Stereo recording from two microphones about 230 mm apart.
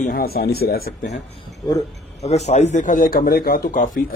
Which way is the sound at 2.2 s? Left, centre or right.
Left.